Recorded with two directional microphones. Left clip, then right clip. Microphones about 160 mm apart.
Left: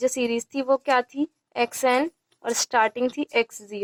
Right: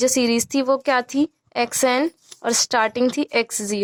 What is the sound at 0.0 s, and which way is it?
A woman's voice, 35° right (ahead or behind).